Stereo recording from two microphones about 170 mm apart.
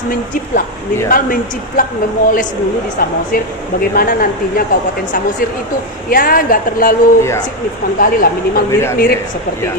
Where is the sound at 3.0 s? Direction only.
60° left (ahead or behind).